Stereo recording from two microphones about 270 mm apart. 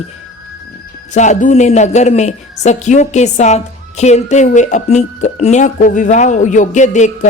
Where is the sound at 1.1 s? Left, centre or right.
Left.